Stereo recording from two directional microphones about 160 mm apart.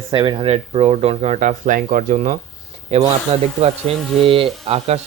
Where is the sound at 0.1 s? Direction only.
30° right (ahead or behind).